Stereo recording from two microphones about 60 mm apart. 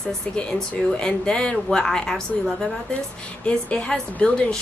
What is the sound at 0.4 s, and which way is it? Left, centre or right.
Speech, centre.